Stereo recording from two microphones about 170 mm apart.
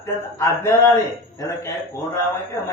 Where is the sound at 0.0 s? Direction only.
15° left (ahead or behind).